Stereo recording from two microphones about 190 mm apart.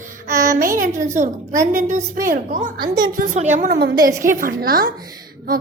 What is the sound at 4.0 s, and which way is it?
Speech, 15° right (ahead or behind).